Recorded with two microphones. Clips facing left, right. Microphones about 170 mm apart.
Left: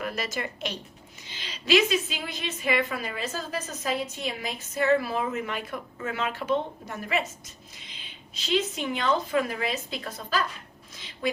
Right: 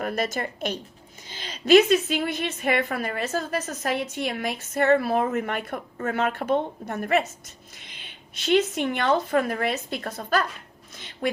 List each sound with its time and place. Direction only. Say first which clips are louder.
0.0 s a woman's voice: right 5 dB; 50° right (ahead or behind)
8.4 s a woman's voice: right 5 dB; 60° right (ahead or behind)